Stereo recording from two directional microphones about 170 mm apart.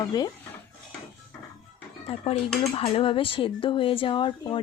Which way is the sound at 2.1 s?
35° left (ahead or behind).